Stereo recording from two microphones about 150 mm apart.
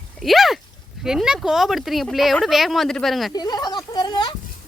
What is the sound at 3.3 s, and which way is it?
Speech, 25° left (ahead or behind).